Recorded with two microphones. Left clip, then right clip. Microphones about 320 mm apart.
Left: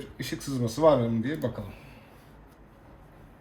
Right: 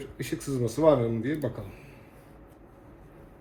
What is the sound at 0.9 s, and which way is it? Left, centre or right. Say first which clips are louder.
Speech: left 1 dB; left.